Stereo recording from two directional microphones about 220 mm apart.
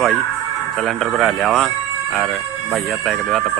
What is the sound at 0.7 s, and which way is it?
Speech, centre (ahead or behind).